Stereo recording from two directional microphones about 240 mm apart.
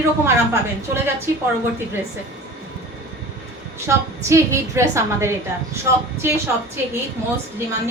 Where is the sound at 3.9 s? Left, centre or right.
Centre.